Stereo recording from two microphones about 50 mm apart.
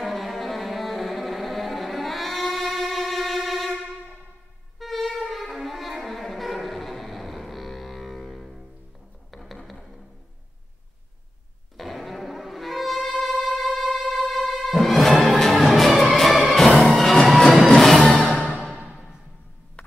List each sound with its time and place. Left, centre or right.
0.0 s music: centre
4.7 s music: centre
9.3 s a sound: centre
9.6 s music: centre
11.7 s music: centre
18.7 s music: right